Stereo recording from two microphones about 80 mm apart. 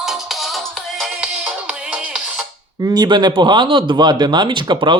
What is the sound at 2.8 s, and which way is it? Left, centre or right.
Speech, right.